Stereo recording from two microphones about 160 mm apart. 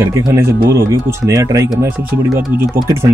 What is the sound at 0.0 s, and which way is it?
Speech, 15° right (ahead or behind).